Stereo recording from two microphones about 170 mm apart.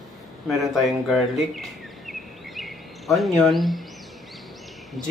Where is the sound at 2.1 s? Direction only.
Centre (ahead or behind).